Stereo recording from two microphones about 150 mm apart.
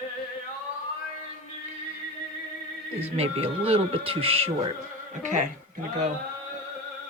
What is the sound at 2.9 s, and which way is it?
Speech, 40° right (ahead or behind).